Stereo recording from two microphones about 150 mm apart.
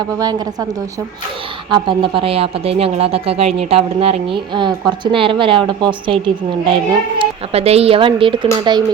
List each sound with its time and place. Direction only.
0.2 s speech: 25° right (ahead or behind)
1.7 s speech: 35° right (ahead or behind)
7.2 s speech: 40° right (ahead or behind)